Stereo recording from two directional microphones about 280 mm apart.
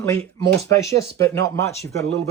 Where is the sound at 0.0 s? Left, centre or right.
Centre.